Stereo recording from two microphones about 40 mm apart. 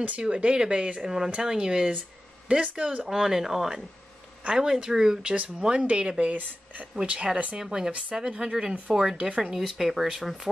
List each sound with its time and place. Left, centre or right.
0.2 s speech: right
1.0 s speech: centre
3.1 s speech: centre
5.2 s speech: right
5.6 s speech: right
7.5 s speech: centre
9.6 s speech: centre